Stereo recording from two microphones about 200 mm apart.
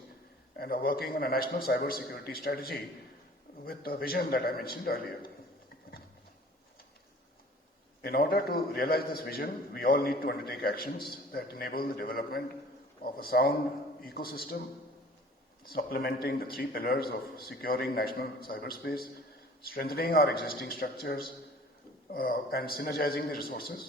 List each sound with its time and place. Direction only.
0.5 s a man's voice: 50° left (ahead or behind)
8.0 s a man's voice: 50° left (ahead or behind)
15.6 s a man's voice: 50° left (ahead or behind)